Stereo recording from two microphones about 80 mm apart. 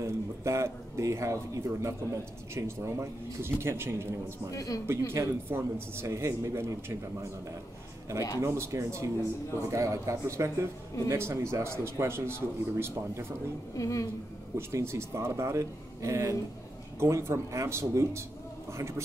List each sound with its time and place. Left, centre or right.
0.0 s a man's voice: right
4.5 s a man's voice: left
4.8 s a man's voice: right
8.4 s a man's voice: right
13.7 s a man's voice: left
14.7 s a man's voice: right